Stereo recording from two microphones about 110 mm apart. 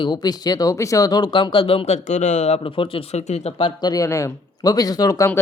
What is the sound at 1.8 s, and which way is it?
Speech, 90° left.